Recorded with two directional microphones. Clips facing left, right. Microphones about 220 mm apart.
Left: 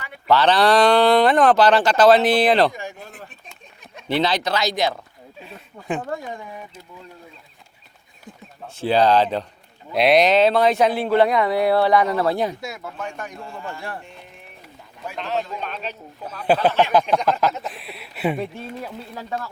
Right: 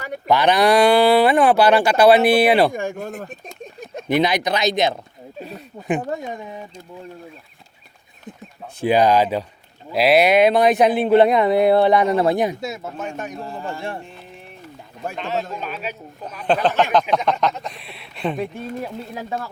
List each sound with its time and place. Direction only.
0.3 s speech: 15° right (ahead or behind)
2.7 s speech: 50° right (ahead or behind)
4.1 s speech: 15° right (ahead or behind)
8.8 s speech: 15° right (ahead or behind)
13.4 s speech: 35° right (ahead or behind)
15.1 s speech: centre (ahead or behind)
16.5 s a sound: 5° left (ahead or behind)
17.2 s speech: centre (ahead or behind)